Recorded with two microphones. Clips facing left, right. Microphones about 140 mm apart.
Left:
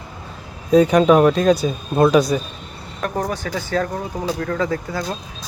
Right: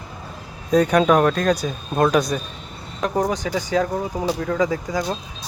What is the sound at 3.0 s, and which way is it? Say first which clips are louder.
Speech: right 2 dB; 15° right (ahead or behind).